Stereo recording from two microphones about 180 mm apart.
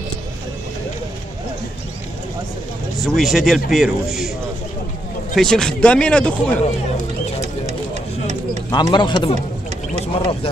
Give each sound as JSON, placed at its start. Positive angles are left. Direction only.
{"t": 3.0, "sound": "speech", "side_deg": 0}
{"t": 5.3, "sound": "speech", "side_deg": 5}
{"t": 7.6, "sound": "a sound", "side_deg": -40}
{"t": 8.6, "sound": "speech", "side_deg": 20}